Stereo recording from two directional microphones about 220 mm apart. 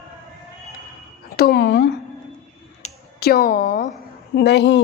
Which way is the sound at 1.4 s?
50° left (ahead or behind).